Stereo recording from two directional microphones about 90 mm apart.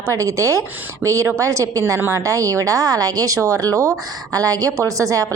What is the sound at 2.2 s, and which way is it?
A woman's voice, 40° right (ahead or behind).